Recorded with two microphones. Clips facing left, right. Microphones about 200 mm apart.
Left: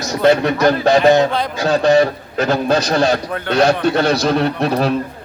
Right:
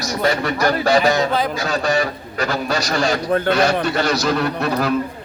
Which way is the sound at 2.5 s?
30° left (ahead or behind).